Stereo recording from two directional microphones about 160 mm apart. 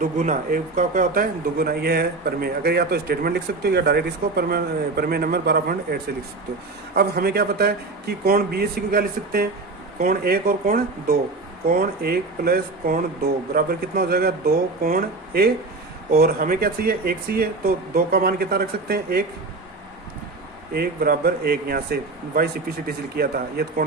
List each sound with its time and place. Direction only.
0.0 s a man's voice: 55° right (ahead or behind); by 15.5 s 75° right (ahead or behind)
16.1 s a man's voice: 65° right (ahead or behind)
20.7 s a man's voice: 65° right (ahead or behind)